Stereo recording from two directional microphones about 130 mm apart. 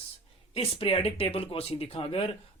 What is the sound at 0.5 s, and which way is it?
Speech, 45° left (ahead or behind).